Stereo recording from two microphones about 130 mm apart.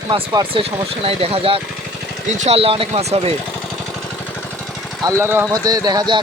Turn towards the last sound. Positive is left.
turn(degrees=-35)  # may be behind; listen again after turning